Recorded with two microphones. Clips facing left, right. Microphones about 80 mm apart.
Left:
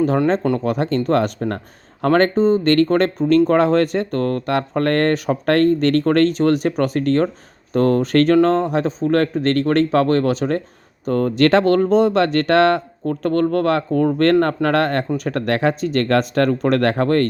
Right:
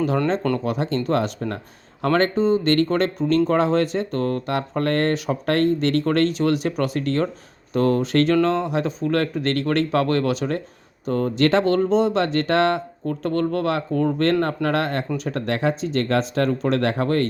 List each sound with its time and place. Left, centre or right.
0.6 s speech: left